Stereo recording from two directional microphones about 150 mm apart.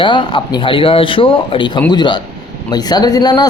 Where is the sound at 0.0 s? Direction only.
35° left (ahead or behind).